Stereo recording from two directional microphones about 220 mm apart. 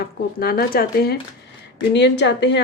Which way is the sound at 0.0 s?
45° left (ahead or behind).